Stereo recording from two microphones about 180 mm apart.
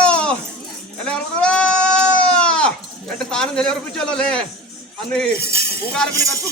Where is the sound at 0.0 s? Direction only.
5° left (ahead or behind).